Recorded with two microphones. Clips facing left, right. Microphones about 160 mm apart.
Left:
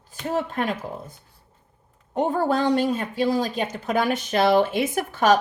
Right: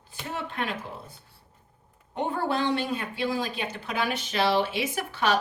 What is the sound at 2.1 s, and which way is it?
Speech, 45° left (ahead or behind).